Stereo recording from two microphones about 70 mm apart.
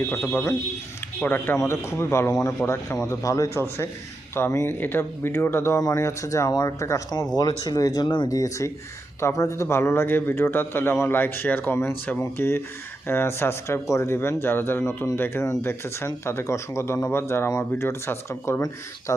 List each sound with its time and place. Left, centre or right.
0.3 s speech: left
1.5 s speech: left
4.4 s speech: left
6.5 s speech: left
7.6 s speech: left
8.3 s speech: left